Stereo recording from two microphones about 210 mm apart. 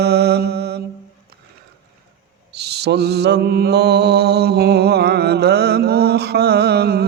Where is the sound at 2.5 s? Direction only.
50° right (ahead or behind).